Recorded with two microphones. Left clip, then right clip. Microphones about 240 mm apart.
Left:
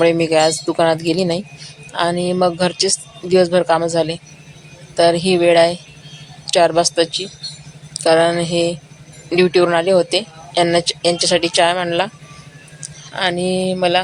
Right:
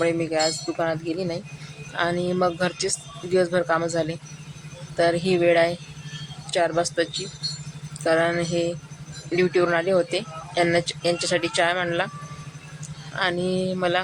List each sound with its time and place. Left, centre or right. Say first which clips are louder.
0.0 s speech: left 9 dB; centre
13.1 s speech: left 6 dB; centre